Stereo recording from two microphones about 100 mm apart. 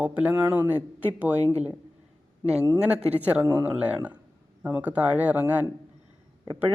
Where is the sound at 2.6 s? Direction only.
15° right (ahead or behind).